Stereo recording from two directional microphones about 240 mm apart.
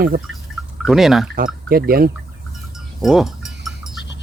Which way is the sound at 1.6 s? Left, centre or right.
Right.